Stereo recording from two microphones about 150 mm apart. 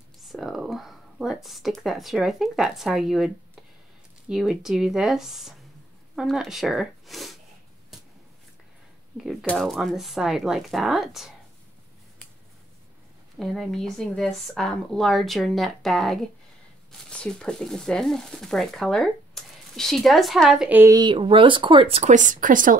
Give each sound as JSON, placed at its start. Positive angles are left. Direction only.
{"t": 0.2, "sound": "speech", "side_deg": 0}
{"t": 4.3, "sound": "speech", "side_deg": -5}
{"t": 9.1, "sound": "speech", "side_deg": 0}
{"t": 13.4, "sound": "speech", "side_deg": 0}
{"t": 20.9, "sound": "speech", "side_deg": -30}
{"t": 22.1, "sound": "speech", "side_deg": -60}